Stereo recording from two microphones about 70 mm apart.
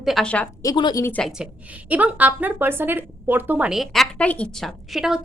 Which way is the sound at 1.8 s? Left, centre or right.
Right.